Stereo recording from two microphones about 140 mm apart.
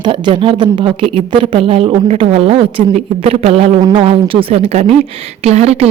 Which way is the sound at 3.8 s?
30° right (ahead or behind).